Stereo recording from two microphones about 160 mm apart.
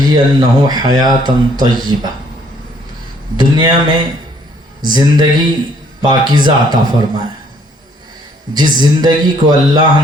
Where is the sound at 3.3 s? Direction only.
25° right (ahead or behind).